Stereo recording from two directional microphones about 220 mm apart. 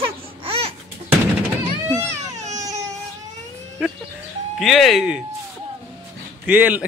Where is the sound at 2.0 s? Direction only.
30° right (ahead or behind).